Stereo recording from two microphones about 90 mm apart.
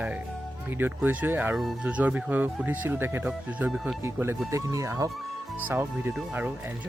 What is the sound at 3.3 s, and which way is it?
Speech, 10° right (ahead or behind).